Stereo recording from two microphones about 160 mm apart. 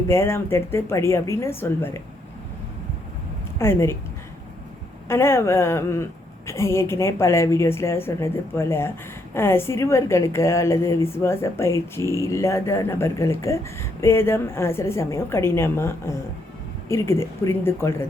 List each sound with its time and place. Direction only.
0.1 s a woman's voice: 15° left (ahead or behind)
3.6 s a woman's voice: 15° left (ahead or behind)
5.0 s a woman's voice: 15° left (ahead or behind)